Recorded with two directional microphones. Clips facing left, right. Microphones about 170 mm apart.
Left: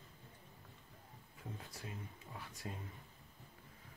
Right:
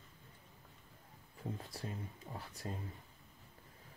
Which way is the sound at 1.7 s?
35° right (ahead or behind).